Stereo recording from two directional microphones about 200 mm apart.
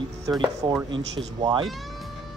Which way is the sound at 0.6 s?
25° right (ahead or behind).